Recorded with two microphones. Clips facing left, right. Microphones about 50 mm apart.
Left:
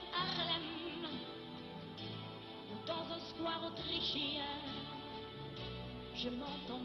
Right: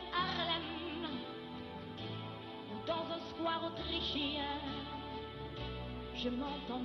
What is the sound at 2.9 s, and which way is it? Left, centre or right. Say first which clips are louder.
Music: right 3 dB; centre.